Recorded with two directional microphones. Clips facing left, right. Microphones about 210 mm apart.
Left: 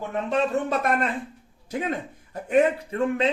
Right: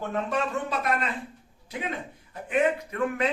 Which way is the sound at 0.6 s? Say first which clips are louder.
Left 4 dB; 50° left (ahead or behind).